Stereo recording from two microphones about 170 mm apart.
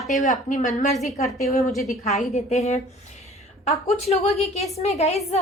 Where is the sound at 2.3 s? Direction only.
40° left (ahead or behind).